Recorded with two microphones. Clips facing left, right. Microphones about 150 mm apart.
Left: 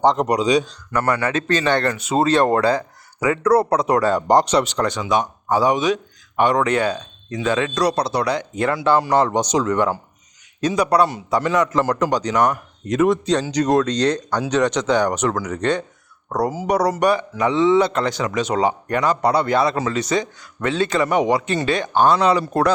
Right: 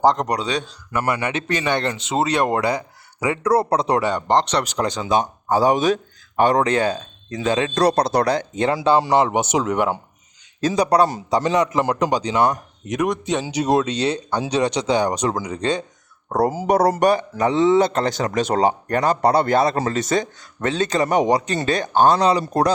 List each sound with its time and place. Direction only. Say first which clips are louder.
0.0 s speech: left 1 dB; 5° left (ahead or behind)
0.7 s speech: left 2 dB; 10° right (ahead or behind)
3.7 s speech: left 1 dB; 30° right (ahead or behind)
4.1 s speech: left 3 dB; 5° left (ahead or behind)
4.9 s speech: even; 30° right (ahead or behind)
7.4 s speech: even; 20° right (ahead or behind)
7.7 s speech: right 2 dB; 50° right (ahead or behind)
8.3 s speech: right 1 dB; 30° right (ahead or behind); by 9.9 s 10° right (ahead or behind)
10.6 s speech: even; 35° right (ahead or behind)
11.6 s speech: left 1 dB; 15° right (ahead or behind)
13.3 s speech: left 2 dB; 10° right (ahead or behind)
14.3 s speech: left 1 dB; 30° right (ahead or behind)
14.5 s speech: left 1 dB; 10° right (ahead or behind)
16.3 s speech: right 2 dB; 50° right (ahead or behind); by 22.7 s 35° right (ahead or behind)